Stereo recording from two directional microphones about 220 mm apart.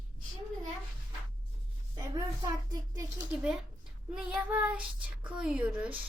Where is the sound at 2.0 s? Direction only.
15° right (ahead or behind).